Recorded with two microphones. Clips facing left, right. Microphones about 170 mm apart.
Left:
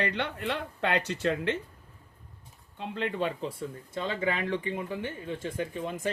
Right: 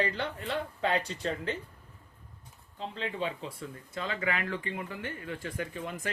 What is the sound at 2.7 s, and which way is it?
Speech, 65° left (ahead or behind).